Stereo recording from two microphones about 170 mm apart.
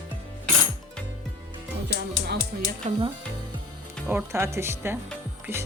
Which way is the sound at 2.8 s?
45° right (ahead or behind).